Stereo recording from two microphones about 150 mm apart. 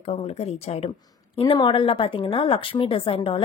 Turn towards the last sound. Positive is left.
turn(degrees=35)  # may be behind; listen again after turning